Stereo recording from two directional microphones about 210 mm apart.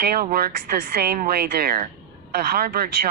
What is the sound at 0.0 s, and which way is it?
Speech, 45° right (ahead or behind).